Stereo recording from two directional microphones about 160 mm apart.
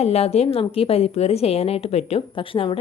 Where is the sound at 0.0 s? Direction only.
40° left (ahead or behind).